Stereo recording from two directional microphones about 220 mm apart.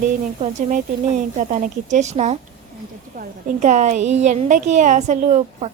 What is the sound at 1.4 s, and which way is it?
A woman's voice, 35° right (ahead or behind).